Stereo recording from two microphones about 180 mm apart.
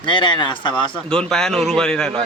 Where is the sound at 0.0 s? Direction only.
25° left (ahead or behind).